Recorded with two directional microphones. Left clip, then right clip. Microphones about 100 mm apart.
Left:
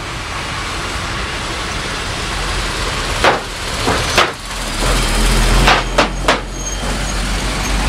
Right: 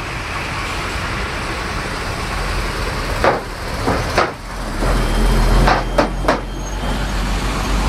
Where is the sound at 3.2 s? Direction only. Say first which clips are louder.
Left 3 dB; 60° left (ahead or behind).